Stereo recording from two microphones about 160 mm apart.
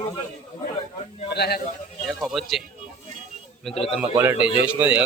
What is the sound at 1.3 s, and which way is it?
Speech, 90° left.